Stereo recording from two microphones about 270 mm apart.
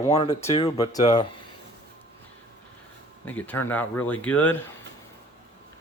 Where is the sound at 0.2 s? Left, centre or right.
Left.